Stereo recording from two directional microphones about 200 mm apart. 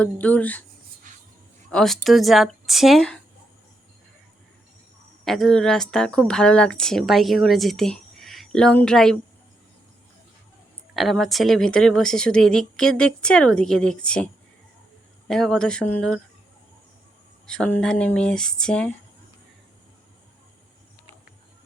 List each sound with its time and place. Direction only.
0.0 s speech: 5° left (ahead or behind)
1.1 s music: 40° right (ahead or behind)
1.7 s speech: centre (ahead or behind)
5.2 s speech: centre (ahead or behind)
10.9 s speech: centre (ahead or behind)
15.3 s speech: centre (ahead or behind)
17.4 s speech: 5° left (ahead or behind)